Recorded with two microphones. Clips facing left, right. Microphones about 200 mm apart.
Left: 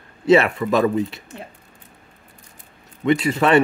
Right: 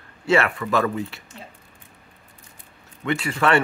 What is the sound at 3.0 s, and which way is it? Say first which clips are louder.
Speech: left 5 dB; 20° left (ahead or behind).